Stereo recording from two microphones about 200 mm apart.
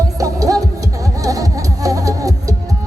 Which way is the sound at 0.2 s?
15° right (ahead or behind).